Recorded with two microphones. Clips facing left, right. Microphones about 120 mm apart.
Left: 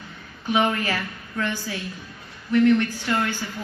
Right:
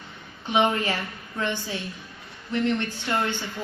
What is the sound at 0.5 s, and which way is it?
A woman's voice, 25° right (ahead or behind).